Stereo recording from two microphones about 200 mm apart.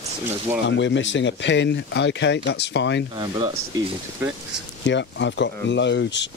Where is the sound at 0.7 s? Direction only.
65° left (ahead or behind).